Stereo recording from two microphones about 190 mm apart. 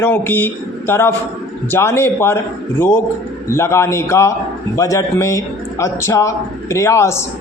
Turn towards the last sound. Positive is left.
turn(degrees=15)  # may be behind; listen again after turning